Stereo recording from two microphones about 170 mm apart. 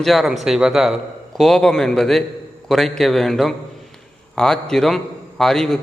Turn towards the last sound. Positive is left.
turn(degrees=5)  # may be behind; listen again after turning